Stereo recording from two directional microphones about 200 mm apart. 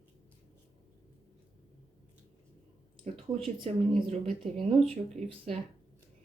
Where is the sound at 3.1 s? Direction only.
35° right (ahead or behind).